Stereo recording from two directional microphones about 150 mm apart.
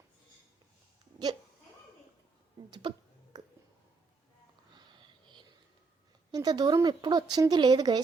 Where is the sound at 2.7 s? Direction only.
30° right (ahead or behind).